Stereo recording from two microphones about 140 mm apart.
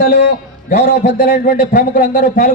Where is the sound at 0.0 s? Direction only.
90° left.